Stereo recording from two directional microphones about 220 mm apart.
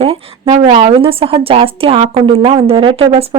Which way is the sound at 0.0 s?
25° right (ahead or behind).